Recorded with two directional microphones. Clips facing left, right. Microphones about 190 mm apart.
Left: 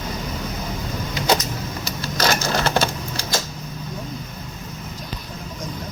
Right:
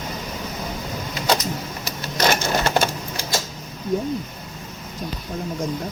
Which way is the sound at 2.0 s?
20° right (ahead or behind).